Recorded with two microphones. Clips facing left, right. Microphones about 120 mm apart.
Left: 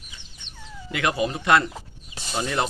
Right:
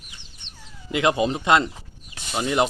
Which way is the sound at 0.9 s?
20° right (ahead or behind).